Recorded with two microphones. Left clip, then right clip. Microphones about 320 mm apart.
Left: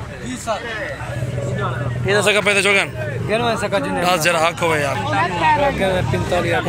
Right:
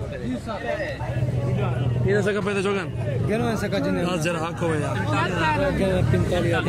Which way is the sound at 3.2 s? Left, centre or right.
Centre.